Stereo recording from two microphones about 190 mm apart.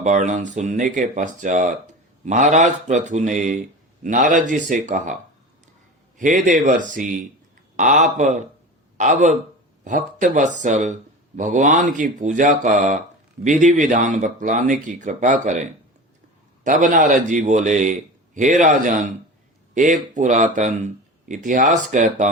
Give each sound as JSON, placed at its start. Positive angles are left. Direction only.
{"t": 0.0, "sound": "speech", "side_deg": -40}
{"t": 6.1, "sound": "speech", "side_deg": -40}